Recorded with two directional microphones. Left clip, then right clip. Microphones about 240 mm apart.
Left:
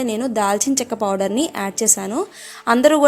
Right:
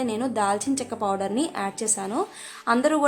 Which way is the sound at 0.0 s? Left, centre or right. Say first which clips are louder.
Left 5 dB; left.